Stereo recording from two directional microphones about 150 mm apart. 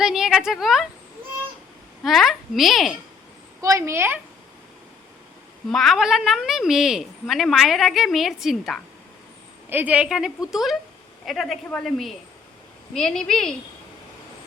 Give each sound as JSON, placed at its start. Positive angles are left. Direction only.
{"t": 0.0, "sound": "a sound", "side_deg": -5}
{"t": 2.0, "sound": "a woman's voice", "side_deg": 0}
{"t": 3.6, "sound": "a woman's voice", "side_deg": -20}
{"t": 5.7, "sound": "a woman's voice", "side_deg": 0}
{"t": 9.6, "sound": "a woman's voice", "side_deg": -10}